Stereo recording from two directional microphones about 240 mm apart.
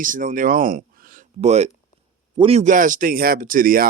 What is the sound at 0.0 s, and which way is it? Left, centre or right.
Speech, right.